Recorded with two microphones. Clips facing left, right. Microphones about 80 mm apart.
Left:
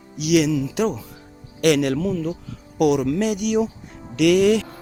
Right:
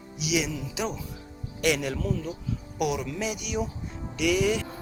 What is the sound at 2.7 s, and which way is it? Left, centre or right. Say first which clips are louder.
Speech: left 11 dB; left.